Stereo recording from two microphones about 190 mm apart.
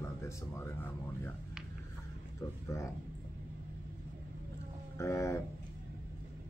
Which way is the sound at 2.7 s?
15° left (ahead or behind).